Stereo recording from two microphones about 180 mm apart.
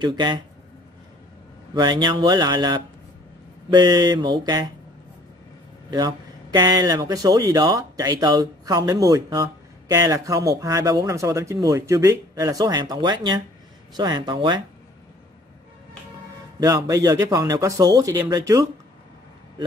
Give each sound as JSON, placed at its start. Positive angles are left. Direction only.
{"t": 0.0, "sound": "speech", "side_deg": -25}
{"t": 1.7, "sound": "speech", "side_deg": -25}
{"t": 5.9, "sound": "speech", "side_deg": -25}
{"t": 16.5, "sound": "speech", "side_deg": -20}